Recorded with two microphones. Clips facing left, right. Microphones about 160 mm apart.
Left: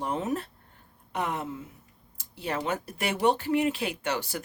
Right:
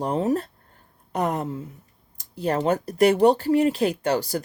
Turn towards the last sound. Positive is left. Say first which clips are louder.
# right 8 dB
turn(degrees=-40)  # may be behind; listen again after turning